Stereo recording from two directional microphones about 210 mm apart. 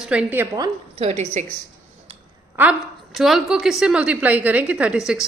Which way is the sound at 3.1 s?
Centre (ahead or behind).